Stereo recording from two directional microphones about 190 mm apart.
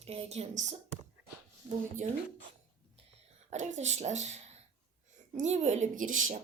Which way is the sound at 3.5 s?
35° right (ahead or behind).